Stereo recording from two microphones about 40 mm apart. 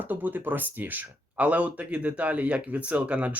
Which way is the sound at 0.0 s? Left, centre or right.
Right.